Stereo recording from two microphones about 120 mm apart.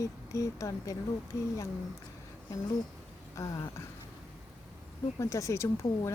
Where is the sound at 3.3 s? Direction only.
25° left (ahead or behind).